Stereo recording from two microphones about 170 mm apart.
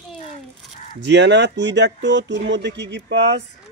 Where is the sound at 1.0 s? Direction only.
90° right.